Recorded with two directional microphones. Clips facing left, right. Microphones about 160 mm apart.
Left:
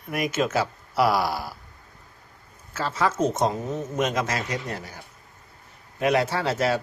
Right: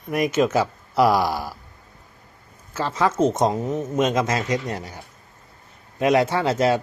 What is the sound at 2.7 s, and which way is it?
Speech, 15° right (ahead or behind).